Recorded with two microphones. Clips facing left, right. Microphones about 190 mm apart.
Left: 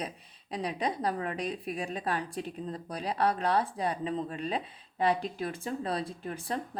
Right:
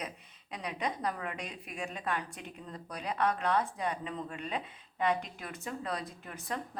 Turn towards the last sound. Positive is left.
turn(degrees=30)  # may be behind; listen again after turning